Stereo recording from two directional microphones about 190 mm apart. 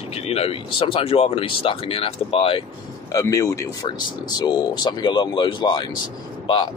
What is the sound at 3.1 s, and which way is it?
Speech, 15° left (ahead or behind).